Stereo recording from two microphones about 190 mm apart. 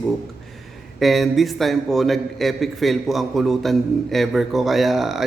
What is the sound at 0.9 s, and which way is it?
A man's voice, centre (ahead or behind).